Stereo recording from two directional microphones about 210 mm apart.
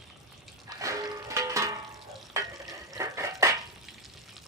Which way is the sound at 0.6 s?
15° right (ahead or behind).